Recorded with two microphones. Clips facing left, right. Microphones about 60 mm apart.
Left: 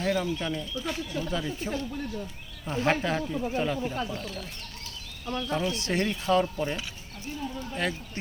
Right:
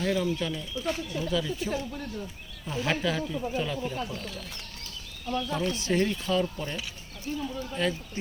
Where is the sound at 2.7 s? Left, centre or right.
Left.